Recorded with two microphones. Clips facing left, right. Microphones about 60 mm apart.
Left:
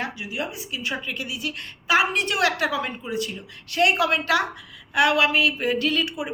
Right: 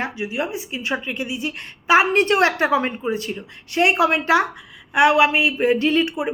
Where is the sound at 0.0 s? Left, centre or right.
Right.